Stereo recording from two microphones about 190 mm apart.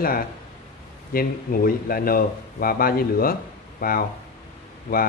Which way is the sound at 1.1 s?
50° left (ahead or behind).